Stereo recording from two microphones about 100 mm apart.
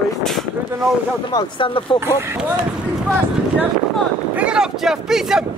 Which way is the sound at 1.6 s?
60° left (ahead or behind).